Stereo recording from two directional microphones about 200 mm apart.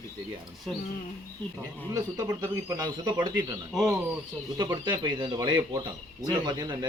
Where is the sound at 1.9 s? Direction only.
20° right (ahead or behind).